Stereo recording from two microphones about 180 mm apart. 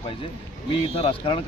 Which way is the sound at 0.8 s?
30° left (ahead or behind).